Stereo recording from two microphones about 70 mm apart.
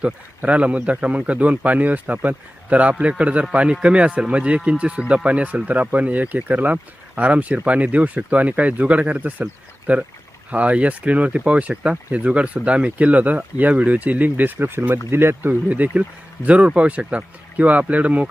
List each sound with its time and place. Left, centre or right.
0.0 s speech: centre